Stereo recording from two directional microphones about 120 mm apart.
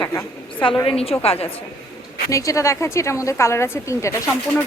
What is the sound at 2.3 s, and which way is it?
A woman's voice, 25° left (ahead or behind).